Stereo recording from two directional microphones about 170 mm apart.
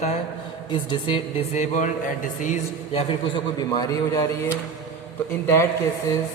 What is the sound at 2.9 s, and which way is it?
A man's voice, 30° left (ahead or behind).